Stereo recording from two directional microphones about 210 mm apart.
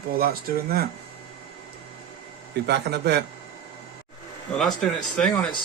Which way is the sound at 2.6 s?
50° right (ahead or behind).